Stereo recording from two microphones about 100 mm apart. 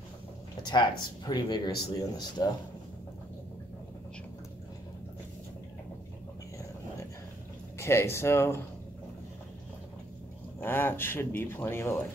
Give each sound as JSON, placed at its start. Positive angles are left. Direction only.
{"t": 0.6, "sound": "speech", "side_deg": 45}
{"t": 7.7, "sound": "speech", "side_deg": 25}
{"t": 10.6, "sound": "speech", "side_deg": 20}